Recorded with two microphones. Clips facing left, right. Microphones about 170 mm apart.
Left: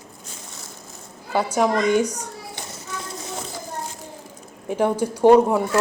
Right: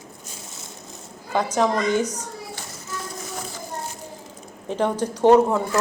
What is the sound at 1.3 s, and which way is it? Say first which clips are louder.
A child's voice: left 1 dB; 10° left (ahead or behind).